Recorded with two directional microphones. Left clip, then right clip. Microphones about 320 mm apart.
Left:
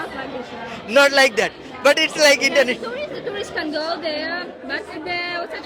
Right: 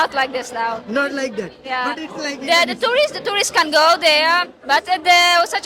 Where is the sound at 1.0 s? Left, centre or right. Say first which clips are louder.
Left 10 dB; left.